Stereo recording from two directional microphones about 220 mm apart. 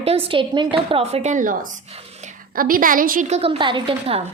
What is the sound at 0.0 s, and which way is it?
A woman's voice, 25° right (ahead or behind).